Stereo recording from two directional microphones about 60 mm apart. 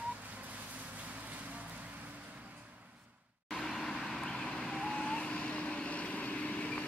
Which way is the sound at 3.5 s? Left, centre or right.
Centre.